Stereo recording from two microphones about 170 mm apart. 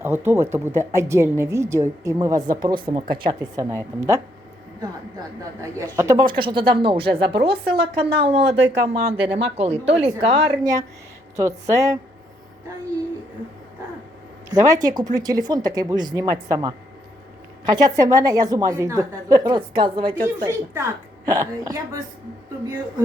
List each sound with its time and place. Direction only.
0.0 s a woman's voice: 15° right (ahead or behind)
5.4 s speech: 20° right (ahead or behind)
10.6 s a woman's voice: 20° right (ahead or behind)
14.5 s a woman's voice: 20° right (ahead or behind)
20.2 s a woman's voice: 15° right (ahead or behind)